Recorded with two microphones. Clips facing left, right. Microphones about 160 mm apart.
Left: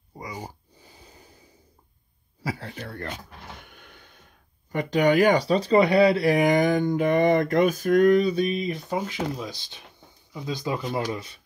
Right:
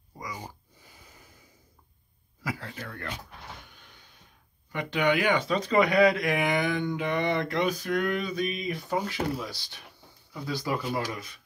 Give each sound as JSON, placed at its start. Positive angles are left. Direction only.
{"t": 0.8, "sound": "snort", "side_deg": 30}
{"t": 2.4, "sound": "speech", "side_deg": 30}
{"t": 3.6, "sound": "a sound", "side_deg": 60}
{"t": 4.7, "sound": "speech", "side_deg": 40}